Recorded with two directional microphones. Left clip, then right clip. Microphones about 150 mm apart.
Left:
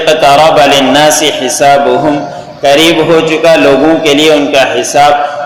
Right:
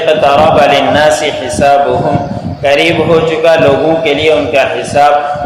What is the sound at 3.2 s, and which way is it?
A man's voice, 25° left (ahead or behind).